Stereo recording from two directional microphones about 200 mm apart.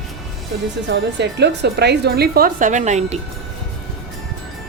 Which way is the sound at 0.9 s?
60° right (ahead or behind).